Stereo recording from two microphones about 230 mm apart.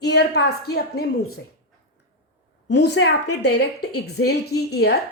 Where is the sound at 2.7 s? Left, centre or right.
Left.